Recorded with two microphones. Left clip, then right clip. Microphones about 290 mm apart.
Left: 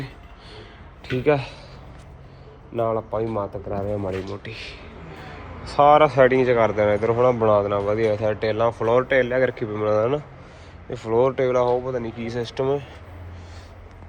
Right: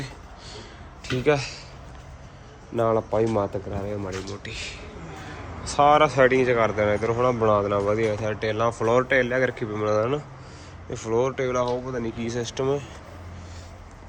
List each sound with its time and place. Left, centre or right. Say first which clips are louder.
1.2 s speech: left 2 dB; centre
2.7 s speech: right 1 dB; centre
3.7 s speech: left 5 dB; centre